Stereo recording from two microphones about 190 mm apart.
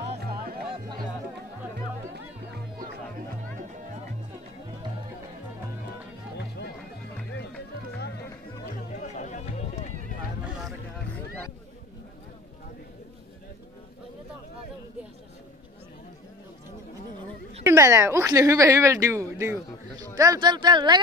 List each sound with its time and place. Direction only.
0.1 s music: 55° right (ahead or behind)
6.3 s music: 60° left (ahead or behind)
9.0 s run: 40° left (ahead or behind)
10.4 s a sound: 5° right (ahead or behind)
17.6 s a woman's voice: 15° right (ahead or behind)